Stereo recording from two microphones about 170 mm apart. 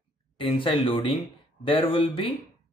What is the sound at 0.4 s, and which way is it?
Speech, 30° left (ahead or behind).